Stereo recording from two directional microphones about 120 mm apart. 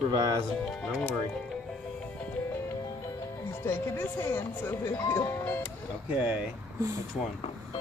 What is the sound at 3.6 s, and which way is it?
Speech, 20° left (ahead or behind).